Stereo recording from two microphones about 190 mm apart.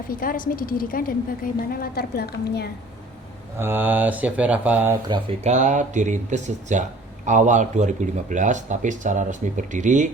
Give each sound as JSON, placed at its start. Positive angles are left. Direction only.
{"t": 0.1, "sound": "a woman's voice", "side_deg": 50}
{"t": 3.6, "sound": "speech", "side_deg": -10}
{"t": 5.0, "sound": "speech", "side_deg": -25}
{"t": 5.5, "sound": "speech", "side_deg": -40}